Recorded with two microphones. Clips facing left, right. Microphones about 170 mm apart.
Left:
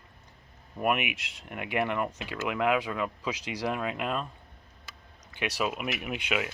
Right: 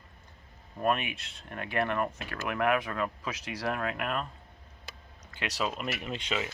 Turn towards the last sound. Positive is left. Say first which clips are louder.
# left 2 dB
turn(degrees=10)  # may be behind; listen again after turning